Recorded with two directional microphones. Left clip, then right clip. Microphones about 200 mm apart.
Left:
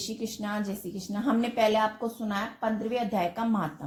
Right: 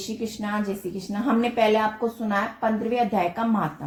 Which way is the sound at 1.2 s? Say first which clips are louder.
Right 4 dB; 35° left (ahead or behind).